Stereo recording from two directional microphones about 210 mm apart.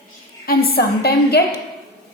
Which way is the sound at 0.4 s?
45° left (ahead or behind).